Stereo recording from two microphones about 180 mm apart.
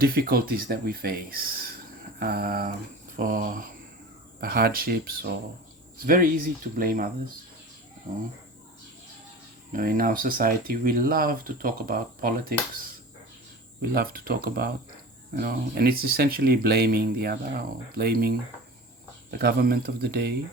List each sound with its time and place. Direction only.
0.0 s speech: 55° right (ahead or behind)
9.7 s speech: 50° right (ahead or behind)
13.9 s speech: 55° right (ahead or behind)
19.4 s speech: 60° right (ahead or behind)